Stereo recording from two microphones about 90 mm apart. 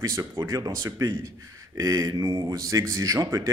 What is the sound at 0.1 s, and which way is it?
Speech, 30° right (ahead or behind).